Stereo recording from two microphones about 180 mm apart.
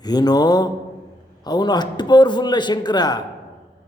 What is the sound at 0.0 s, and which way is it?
A man's voice, 20° left (ahead or behind).